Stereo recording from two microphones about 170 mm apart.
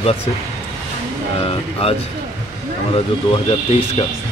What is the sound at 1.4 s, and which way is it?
Speech, 35° left (ahead or behind).